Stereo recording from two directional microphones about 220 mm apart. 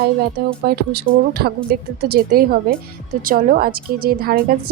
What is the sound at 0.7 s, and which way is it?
A woman's voice, 45° right (ahead or behind).